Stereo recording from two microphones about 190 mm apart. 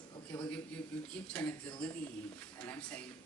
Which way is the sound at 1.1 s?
10° left (ahead or behind).